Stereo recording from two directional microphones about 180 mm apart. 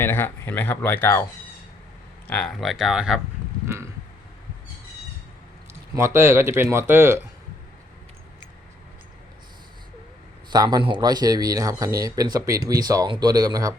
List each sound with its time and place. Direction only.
0.0 s speech: 10° left (ahead or behind)
2.2 s speech: 5° left (ahead or behind)
5.9 s speech: 15° right (ahead or behind)
10.5 s speech: 25° right (ahead or behind)